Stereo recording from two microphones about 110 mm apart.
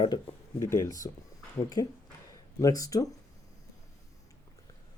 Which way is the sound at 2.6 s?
30° left (ahead or behind).